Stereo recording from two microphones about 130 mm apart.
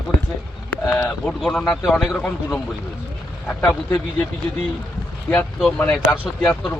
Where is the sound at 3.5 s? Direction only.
10° left (ahead or behind).